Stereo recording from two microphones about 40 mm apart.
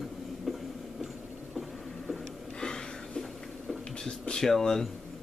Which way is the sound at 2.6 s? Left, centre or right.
Centre.